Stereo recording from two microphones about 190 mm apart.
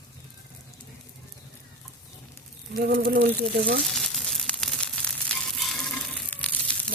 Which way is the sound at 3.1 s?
55° right (ahead or behind).